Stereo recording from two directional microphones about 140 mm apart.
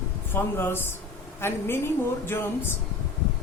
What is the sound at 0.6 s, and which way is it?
A woman's voice, 15° left (ahead or behind).